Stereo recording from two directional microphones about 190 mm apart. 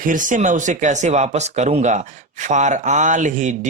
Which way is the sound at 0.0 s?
45° right (ahead or behind).